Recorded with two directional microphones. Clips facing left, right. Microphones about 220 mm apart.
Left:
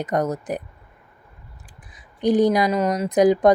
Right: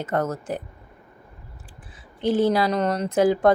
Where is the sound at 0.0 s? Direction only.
15° left (ahead or behind).